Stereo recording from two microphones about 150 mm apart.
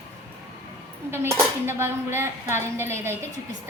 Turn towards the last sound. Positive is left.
turn(degrees=-15)  # may be behind; listen again after turning